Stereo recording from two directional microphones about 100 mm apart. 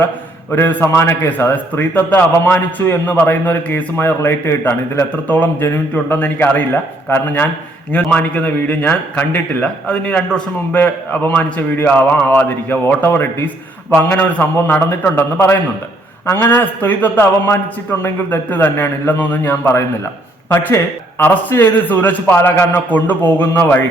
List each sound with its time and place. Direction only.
0.5 s a man's voice: 20° left (ahead or behind)